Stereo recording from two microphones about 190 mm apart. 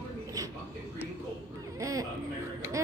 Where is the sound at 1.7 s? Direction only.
15° right (ahead or behind).